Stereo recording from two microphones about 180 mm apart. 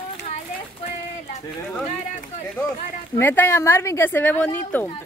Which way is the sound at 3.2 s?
10° left (ahead or behind).